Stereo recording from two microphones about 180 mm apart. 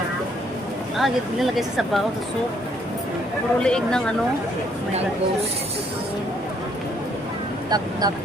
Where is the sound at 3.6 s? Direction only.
5° left (ahead or behind).